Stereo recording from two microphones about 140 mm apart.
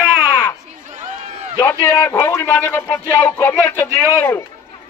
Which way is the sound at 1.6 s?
10° left (ahead or behind).